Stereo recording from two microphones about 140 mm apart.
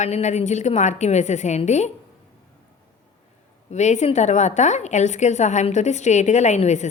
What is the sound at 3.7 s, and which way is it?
A woman's voice, 55° left (ahead or behind).